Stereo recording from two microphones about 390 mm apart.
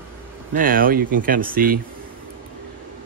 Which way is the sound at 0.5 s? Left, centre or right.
Right.